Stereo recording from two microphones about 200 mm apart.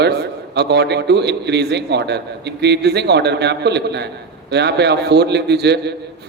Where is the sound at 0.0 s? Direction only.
55° right (ahead or behind).